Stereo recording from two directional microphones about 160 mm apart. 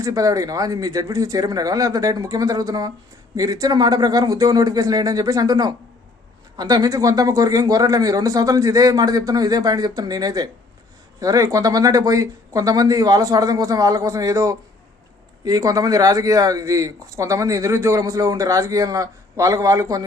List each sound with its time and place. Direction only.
0.0 s speech: 20° right (ahead or behind)